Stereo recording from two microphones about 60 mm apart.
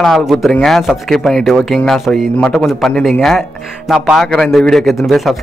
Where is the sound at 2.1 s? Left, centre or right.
Centre.